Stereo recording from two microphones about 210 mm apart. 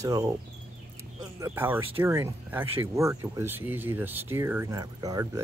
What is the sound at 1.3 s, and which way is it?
Speech, 10° right (ahead or behind).